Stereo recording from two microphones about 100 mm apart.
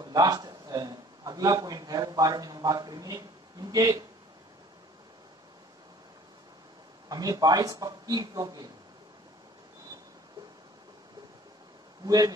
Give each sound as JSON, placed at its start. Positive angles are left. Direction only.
{"t": 0.0, "sound": "a man's voice", "side_deg": -40}
{"t": 7.1, "sound": "a man's voice", "side_deg": -40}
{"t": 12.1, "sound": "a man's voice", "side_deg": -40}